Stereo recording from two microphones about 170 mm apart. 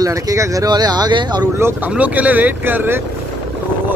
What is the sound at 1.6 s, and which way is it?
Speech, 10° right (ahead or behind).